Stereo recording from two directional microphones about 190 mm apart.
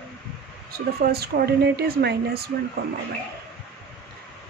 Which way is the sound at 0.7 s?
55° right (ahead or behind).